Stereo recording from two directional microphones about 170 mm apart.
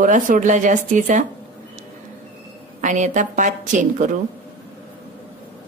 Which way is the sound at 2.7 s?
45° right (ahead or behind).